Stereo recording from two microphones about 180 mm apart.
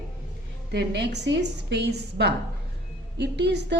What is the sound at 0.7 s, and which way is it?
A woman's voice, 70° right (ahead or behind).